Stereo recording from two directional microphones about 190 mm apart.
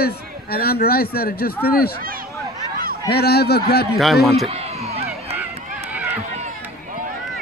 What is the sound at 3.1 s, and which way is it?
Speech, 55° left (ahead or behind).